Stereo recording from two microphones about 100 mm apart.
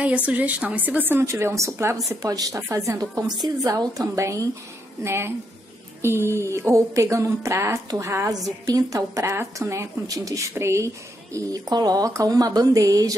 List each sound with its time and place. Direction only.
0.0 s a woman's voice: 15° right (ahead or behind)
1.3 s a woman's voice: 30° right (ahead or behind)
11.3 s speech: 40° right (ahead or behind)